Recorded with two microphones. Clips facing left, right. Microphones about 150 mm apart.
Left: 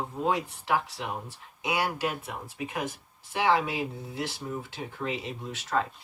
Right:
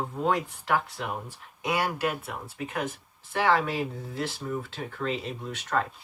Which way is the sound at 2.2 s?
15° left (ahead or behind).